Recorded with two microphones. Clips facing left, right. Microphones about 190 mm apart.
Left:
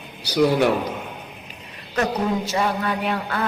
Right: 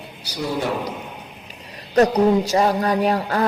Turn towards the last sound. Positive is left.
turn(degrees=-40)  # may be behind; listen again after turning